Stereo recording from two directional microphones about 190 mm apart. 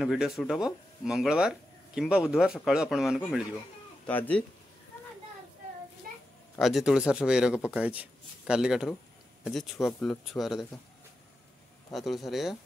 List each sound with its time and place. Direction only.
0.0 s speech: centre (ahead or behind)
6.0 s a sound: 50° right (ahead or behind)
6.6 s speech: centre (ahead or behind)
11.9 s speech: centre (ahead or behind)